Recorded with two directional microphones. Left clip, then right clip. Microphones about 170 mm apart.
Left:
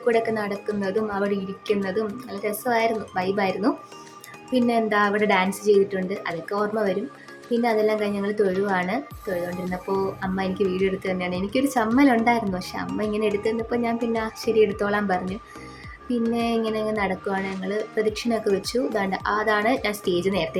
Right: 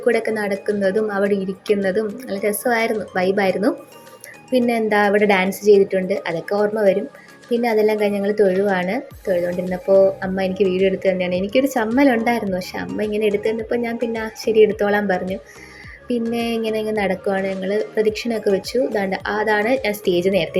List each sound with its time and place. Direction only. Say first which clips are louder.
0.0 s speech: right 3 dB; 15° right (ahead or behind)
8.4 s speech: right 6 dB; centre (ahead or behind)
8.7 s speech: right 3 dB; 20° right (ahead or behind)